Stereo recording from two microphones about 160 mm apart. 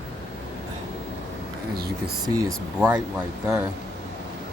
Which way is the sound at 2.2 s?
20° right (ahead or behind).